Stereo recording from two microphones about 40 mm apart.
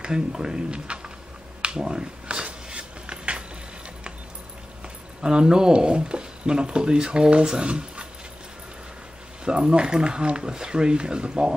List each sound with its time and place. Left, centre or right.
0.0 s speech: centre
1.6 s a sound: right
5.2 s speech: centre
9.4 s speech: right